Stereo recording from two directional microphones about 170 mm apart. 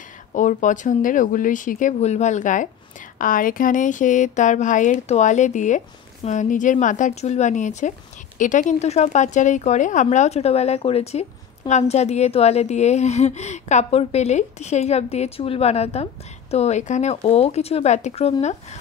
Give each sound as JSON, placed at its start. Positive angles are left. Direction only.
{"t": 0.3, "sound": "speech", "side_deg": 50}